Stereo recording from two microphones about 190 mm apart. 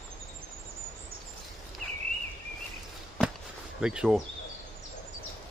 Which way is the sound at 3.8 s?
5° right (ahead or behind).